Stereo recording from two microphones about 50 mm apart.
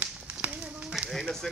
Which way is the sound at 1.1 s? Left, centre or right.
Centre.